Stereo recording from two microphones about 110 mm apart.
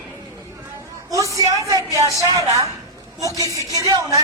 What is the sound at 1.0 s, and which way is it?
Speech, 30° right (ahead or behind).